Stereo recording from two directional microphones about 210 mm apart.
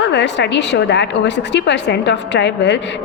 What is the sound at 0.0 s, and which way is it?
A woman's voice, 55° left (ahead or behind).